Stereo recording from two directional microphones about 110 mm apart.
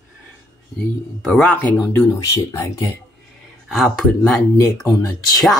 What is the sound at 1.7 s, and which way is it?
Speech, 30° left (ahead or behind).